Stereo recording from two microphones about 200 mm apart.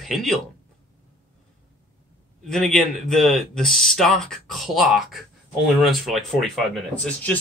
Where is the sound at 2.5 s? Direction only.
Centre (ahead or behind).